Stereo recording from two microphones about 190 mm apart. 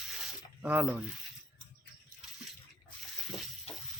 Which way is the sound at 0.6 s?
10° right (ahead or behind).